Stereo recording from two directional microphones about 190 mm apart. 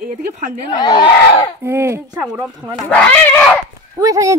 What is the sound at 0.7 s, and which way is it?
Speech, 20° left (ahead or behind).